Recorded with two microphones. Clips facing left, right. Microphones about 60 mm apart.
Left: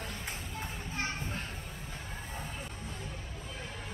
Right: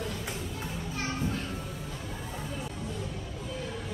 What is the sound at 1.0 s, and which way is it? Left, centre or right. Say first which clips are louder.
Children playing: right 4 dB; left.